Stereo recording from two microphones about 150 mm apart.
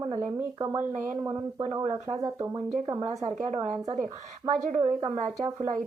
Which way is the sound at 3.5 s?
45° right (ahead or behind).